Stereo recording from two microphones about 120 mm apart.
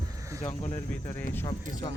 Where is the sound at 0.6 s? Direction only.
70° left (ahead or behind).